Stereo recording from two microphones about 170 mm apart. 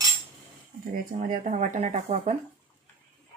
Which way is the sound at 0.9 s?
50° right (ahead or behind).